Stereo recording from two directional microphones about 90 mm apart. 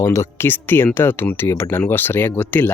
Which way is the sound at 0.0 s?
35° left (ahead or behind).